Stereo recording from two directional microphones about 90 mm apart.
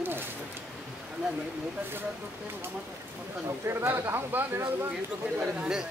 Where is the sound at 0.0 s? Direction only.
25° right (ahead or behind).